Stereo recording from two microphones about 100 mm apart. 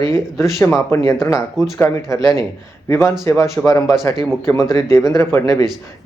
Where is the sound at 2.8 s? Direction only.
25° left (ahead or behind).